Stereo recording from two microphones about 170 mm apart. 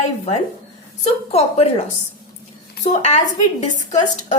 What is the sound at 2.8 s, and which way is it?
A woman's voice, 40° left (ahead or behind).